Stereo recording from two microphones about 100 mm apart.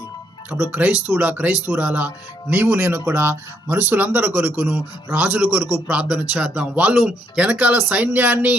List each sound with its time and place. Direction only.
0.5 s speech: 15° right (ahead or behind)
5.3 s a man's voice: 5° right (ahead or behind)